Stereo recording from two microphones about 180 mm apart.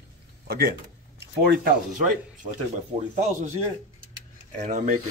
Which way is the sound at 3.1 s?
40° right (ahead or behind).